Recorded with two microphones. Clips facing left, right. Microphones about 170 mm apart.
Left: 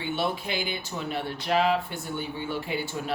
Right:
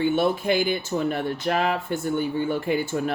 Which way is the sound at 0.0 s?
50° right (ahead or behind).